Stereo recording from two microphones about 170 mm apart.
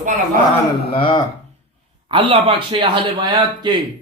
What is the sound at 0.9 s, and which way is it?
Speech, 30° left (ahead or behind).